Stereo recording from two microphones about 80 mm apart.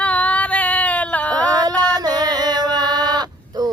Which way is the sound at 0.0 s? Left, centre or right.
Centre.